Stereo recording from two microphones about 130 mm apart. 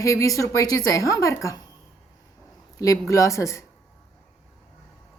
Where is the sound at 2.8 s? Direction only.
25° left (ahead or behind).